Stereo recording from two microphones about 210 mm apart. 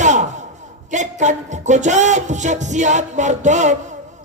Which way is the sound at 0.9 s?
35° right (ahead or behind).